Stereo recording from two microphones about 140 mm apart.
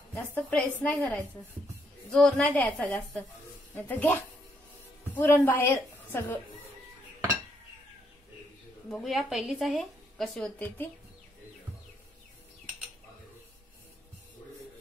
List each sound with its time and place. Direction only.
0.1 s a woman's voice: 15° left (ahead or behind)
8.9 s a woman's voice: centre (ahead or behind)